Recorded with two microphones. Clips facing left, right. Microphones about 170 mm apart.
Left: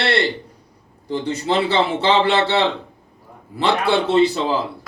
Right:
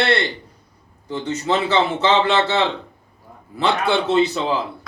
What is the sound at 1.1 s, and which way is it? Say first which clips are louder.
A man's voice: left 1 dB; 35° left (ahead or behind).